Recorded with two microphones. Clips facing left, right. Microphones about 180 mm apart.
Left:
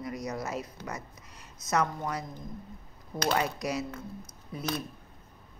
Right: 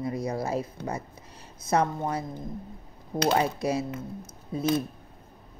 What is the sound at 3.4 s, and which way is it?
Speech, 30° right (ahead or behind).